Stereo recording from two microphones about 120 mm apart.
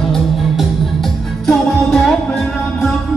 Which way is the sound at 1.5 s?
5° left (ahead or behind).